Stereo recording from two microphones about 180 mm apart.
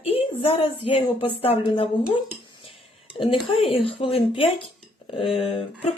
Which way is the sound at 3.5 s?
30° left (ahead or behind).